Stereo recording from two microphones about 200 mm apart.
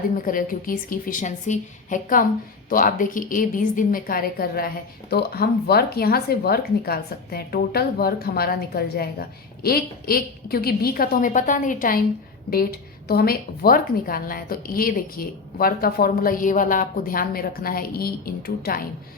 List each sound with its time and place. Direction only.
0.3 s a woman's voice: 45° left (ahead or behind)
13.1 s a woman's voice: 50° left (ahead or behind)